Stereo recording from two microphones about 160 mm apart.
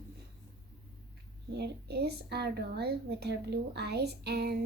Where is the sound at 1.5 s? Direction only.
90° right.